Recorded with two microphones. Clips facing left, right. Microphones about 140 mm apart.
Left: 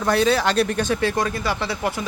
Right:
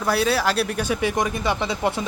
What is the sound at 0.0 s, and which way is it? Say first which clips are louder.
Speech: left 2 dB; 5° right (ahead or behind).